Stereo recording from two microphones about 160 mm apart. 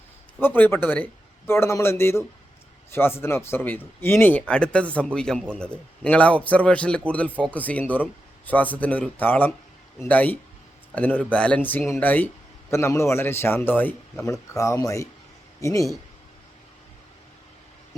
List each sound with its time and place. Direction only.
0.3 s speech: 10° left (ahead or behind)